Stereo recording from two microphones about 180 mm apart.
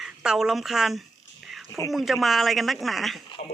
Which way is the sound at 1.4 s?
Centre (ahead or behind).